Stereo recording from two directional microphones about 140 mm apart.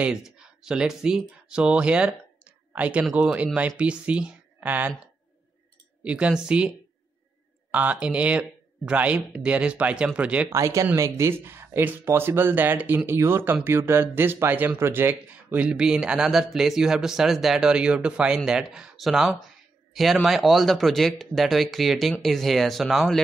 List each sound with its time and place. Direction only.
0.0 s speech: 5° right (ahead or behind)
7.7 s speech: 10° right (ahead or behind)
10.5 s speech: 20° right (ahead or behind); by 23.2 s centre (ahead or behind)